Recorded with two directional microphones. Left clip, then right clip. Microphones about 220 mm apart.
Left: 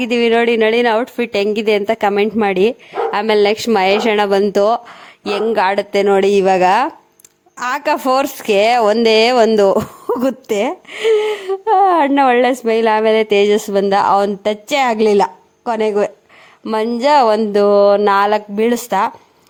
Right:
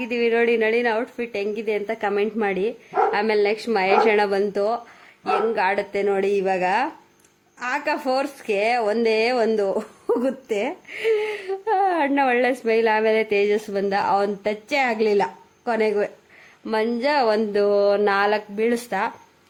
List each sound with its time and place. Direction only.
0.0 s speech: 35° left (ahead or behind)